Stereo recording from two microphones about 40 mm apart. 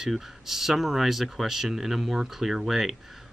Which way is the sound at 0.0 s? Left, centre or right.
Centre.